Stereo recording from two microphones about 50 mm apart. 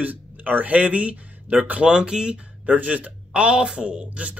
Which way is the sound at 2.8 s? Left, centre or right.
Right.